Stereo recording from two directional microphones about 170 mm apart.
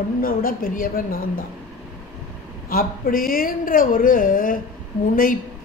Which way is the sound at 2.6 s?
55° left (ahead or behind).